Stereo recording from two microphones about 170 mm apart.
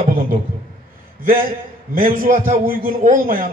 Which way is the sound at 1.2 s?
55° right (ahead or behind).